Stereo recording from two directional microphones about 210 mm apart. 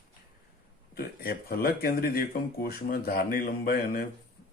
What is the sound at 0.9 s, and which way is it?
Speech, 45° left (ahead or behind).